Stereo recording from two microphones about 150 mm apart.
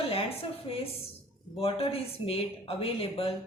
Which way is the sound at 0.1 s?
40° left (ahead or behind).